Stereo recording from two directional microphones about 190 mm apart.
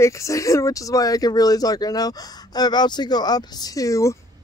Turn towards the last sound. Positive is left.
turn(degrees=15)  # may be behind; listen again after turning